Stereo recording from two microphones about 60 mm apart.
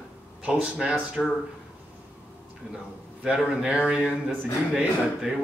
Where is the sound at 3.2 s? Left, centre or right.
Centre.